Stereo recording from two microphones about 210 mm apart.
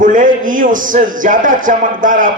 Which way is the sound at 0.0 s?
40° right (ahead or behind).